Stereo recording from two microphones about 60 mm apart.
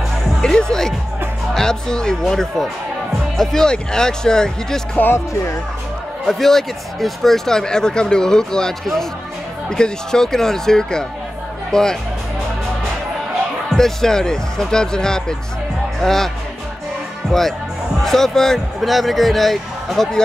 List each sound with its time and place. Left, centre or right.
0.4 s speech: centre
5.1 s speech: left
6.2 s speech: centre
13.7 s speech: centre
17.3 s speech: centre